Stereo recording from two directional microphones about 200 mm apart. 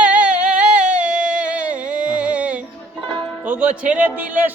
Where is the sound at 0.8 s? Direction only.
40° right (ahead or behind).